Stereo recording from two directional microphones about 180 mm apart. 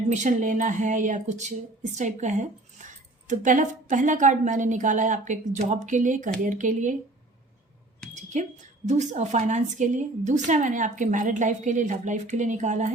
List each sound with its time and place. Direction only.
0.1 s a woman's voice: 40° right (ahead or behind)
8.1 s a sound: 40° right (ahead or behind)
8.9 s a woman's voice: 40° right (ahead or behind)